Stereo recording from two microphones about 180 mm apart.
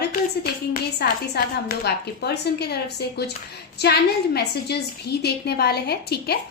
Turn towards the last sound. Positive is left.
turn(degrees=60)  # may be behind; listen again after turning